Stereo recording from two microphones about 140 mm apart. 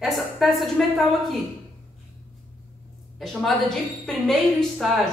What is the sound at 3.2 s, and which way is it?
A woman's voice, 5° left (ahead or behind).